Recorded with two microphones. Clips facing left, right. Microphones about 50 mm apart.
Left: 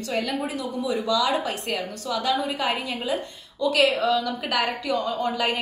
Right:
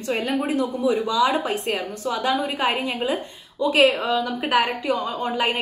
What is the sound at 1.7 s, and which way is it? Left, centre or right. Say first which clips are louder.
A woman's voice: right 2 dB; right.